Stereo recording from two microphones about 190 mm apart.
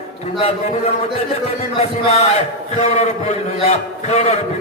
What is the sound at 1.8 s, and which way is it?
A man's voice, 35° left (ahead or behind).